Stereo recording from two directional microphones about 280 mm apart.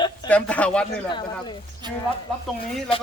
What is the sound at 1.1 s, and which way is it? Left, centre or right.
Speech, centre.